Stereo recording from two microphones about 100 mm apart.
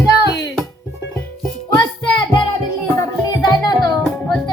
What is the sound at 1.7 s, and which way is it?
Music, 55° left (ahead or behind).